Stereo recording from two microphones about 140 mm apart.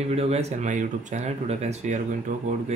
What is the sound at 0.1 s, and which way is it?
Speech, 50° right (ahead or behind).